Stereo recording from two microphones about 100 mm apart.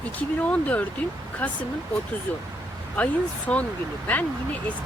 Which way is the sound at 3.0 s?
15° left (ahead or behind).